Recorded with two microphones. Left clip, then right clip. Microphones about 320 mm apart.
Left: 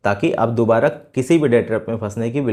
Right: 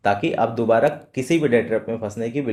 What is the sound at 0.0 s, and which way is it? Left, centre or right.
Speech, left.